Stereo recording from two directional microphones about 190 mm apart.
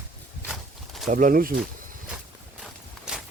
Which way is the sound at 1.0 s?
45° right (ahead or behind).